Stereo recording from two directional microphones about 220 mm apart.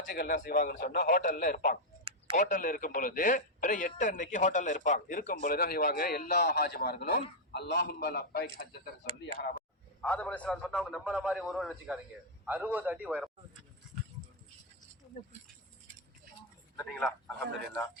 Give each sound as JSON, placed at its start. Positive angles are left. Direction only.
{"t": 0.0, "sound": "speech", "side_deg": 45}
{"t": 10.0, "sound": "a man's voice", "side_deg": 5}
{"t": 16.7, "sound": "a man's voice", "side_deg": 5}